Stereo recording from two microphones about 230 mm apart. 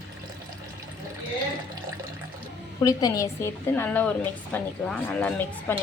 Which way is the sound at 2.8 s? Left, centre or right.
Centre.